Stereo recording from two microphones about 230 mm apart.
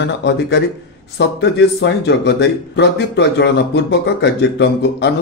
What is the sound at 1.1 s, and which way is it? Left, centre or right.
Speech, left.